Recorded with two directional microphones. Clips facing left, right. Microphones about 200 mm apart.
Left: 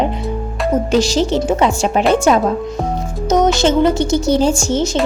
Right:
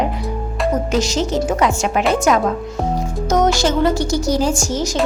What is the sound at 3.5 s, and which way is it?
A woman's voice, 20° left (ahead or behind).